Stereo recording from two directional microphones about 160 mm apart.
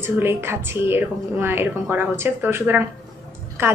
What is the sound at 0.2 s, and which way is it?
A woman's voice, 15° right (ahead or behind).